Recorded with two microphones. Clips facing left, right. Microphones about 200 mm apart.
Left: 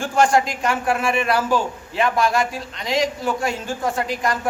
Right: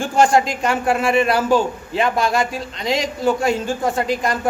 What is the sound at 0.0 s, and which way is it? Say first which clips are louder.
A man's voice: right 2 dB; 25° right (ahead or behind).